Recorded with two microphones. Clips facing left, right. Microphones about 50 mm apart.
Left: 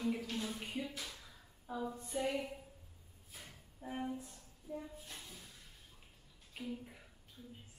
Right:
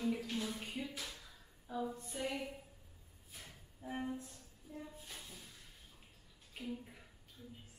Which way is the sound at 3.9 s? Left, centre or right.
Centre.